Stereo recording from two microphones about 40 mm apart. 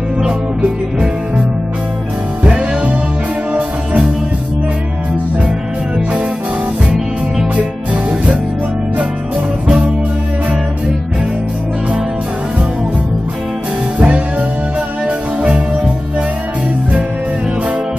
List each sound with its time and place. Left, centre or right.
0.6 s music: right
2.4 s music: right
13.9 s music: right